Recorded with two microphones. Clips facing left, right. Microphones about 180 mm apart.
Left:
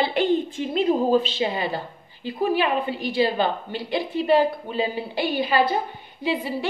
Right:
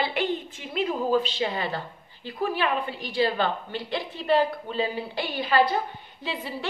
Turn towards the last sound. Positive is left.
turn(degrees=15)  # may be behind; listen again after turning